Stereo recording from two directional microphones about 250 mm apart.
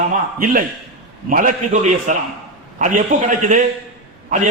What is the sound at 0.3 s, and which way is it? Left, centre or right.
A man's voice, right.